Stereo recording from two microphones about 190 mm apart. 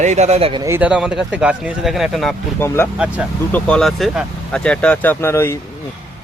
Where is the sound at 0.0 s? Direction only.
35° right (ahead or behind).